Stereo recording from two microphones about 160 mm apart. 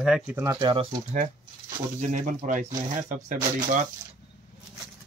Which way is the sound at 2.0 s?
50° right (ahead or behind).